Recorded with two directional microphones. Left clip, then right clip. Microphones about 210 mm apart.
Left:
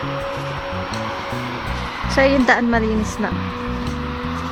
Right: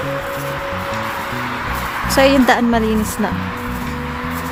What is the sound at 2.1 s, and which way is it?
Speech, 10° right (ahead or behind).